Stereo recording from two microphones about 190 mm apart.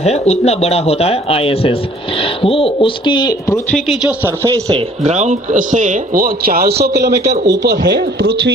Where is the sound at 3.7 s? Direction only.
5° right (ahead or behind).